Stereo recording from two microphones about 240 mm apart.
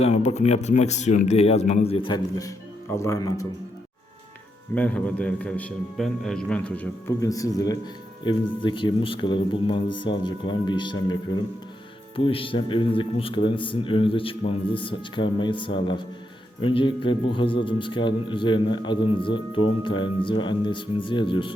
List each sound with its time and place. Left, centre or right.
0.0 s speech: left
4.7 s a man's voice: centre
12.1 s speech: left